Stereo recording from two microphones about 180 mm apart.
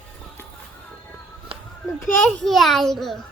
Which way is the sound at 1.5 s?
30° right (ahead or behind).